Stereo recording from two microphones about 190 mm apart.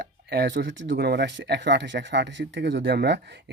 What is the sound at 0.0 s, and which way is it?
Speech, 60° right (ahead or behind).